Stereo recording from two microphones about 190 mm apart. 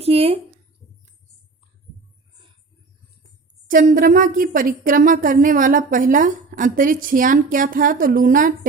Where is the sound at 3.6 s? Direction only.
45° right (ahead or behind).